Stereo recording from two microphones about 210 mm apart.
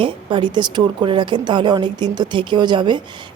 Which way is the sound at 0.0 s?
25° right (ahead or behind).